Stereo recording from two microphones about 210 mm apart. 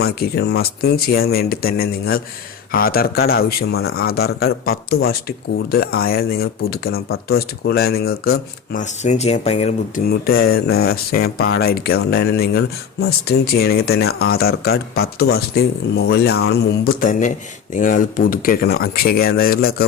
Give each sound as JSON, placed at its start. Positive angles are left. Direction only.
{"t": 0.0, "sound": "speech", "side_deg": 50}
{"t": 10.0, "sound": "speech", "side_deg": 45}
{"t": 10.5, "sound": "speech", "side_deg": 80}
{"t": 10.8, "sound": "speech", "side_deg": 45}